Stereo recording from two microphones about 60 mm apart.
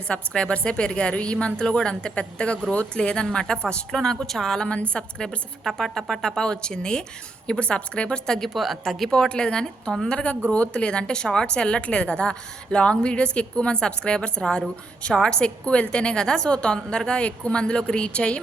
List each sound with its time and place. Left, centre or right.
0.1 s a woman's voice: centre
5.6 s a woman's voice: centre
8.4 s a woman's voice: centre
9.0 s a woman's voice: centre